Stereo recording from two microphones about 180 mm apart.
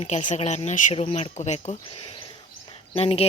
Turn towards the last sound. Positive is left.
turn(degrees=35)  # may be behind; listen again after turning